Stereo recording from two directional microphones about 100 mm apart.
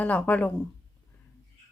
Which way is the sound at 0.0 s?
15° left (ahead or behind).